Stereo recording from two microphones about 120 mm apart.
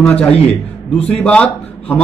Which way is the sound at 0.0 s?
10° left (ahead or behind).